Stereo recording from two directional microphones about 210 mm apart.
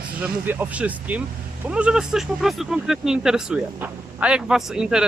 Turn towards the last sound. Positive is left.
turn(degrees=-5)  # may be behind; listen again after turning